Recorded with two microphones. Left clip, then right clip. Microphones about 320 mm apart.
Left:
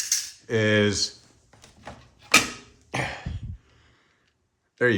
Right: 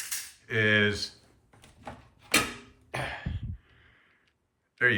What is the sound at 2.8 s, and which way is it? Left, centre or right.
Cough, left.